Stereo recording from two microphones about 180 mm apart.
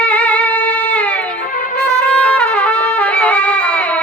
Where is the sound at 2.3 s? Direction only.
5° left (ahead or behind).